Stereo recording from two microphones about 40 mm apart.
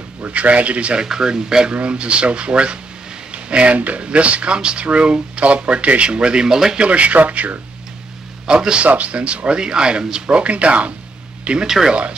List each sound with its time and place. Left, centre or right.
0.2 s speech: right
1.0 s speech: centre
6.8 s speech: right
8.5 s speech: right
8.8 s speech: right
11.6 s speech: centre
11.9 s speech: right